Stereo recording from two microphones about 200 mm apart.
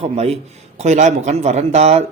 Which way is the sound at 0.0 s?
35° right (ahead or behind).